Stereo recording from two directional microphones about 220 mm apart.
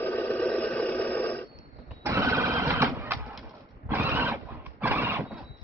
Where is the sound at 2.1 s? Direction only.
15° right (ahead or behind).